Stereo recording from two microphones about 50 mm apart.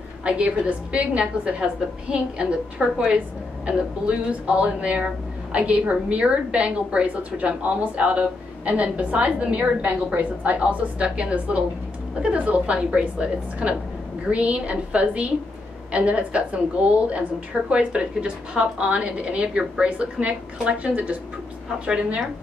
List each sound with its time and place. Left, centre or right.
0.2 s speech: right